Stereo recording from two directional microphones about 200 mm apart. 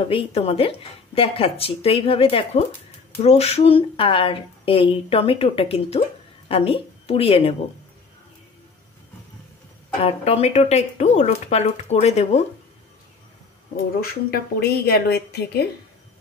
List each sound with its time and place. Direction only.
0.1 s speech: 30° left (ahead or behind)
10.0 s speech: 30° left (ahead or behind)
14.0 s a woman's voice: 50° left (ahead or behind)